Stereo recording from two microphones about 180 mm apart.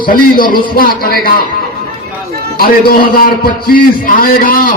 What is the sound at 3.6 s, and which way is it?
A man's voice, 55° left (ahead or behind).